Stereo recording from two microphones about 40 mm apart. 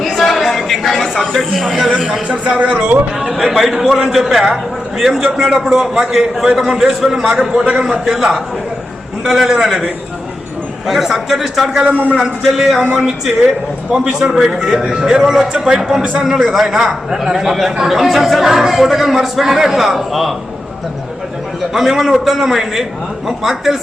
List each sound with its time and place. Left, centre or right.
0.1 s chatter: centre
1.2 s a sound: centre
1.5 s a man's voice: centre
2.2 s speech: right
3.4 s a man's voice: centre
5.5 s a man's voice: centre
10.8 s a man's voice: centre
11.9 s a man's voice: right
12.4 s a man's voice: centre
13.9 s a man's voice: centre
21.7 s a man's voice: centre